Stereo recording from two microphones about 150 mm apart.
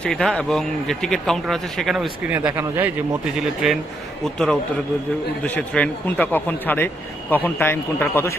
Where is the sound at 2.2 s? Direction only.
10° right (ahead or behind).